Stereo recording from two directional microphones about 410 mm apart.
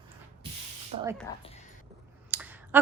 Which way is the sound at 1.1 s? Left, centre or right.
Centre.